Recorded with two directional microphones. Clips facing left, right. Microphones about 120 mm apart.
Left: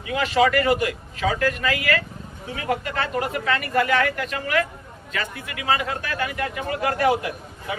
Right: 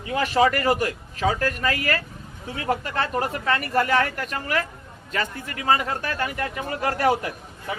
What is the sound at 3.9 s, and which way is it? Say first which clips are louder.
Speech: left 1 dB; 35° right (ahead or behind).